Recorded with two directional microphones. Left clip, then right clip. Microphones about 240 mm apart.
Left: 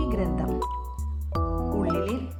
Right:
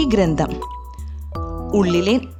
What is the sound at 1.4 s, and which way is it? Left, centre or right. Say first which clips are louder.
Music: even; centre.